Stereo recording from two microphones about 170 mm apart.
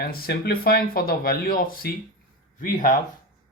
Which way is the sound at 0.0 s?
70° left (ahead or behind).